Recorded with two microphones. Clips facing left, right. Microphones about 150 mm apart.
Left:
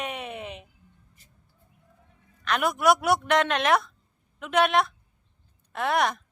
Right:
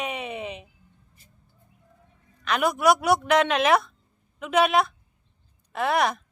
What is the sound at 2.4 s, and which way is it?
Speech, centre (ahead or behind).